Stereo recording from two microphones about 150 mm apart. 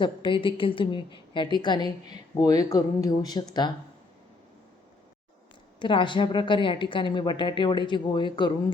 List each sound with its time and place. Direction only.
0.0 s a woman's voice: 35° left (ahead or behind)
5.8 s a woman's voice: 30° left (ahead or behind)